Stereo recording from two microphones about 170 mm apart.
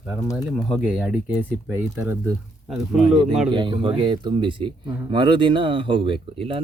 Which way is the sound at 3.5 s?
25° right (ahead or behind).